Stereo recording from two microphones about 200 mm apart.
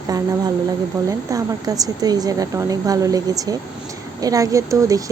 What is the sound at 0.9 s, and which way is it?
A woman's voice, 20° right (ahead or behind).